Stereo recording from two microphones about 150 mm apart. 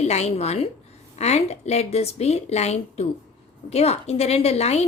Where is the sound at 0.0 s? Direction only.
45° left (ahead or behind).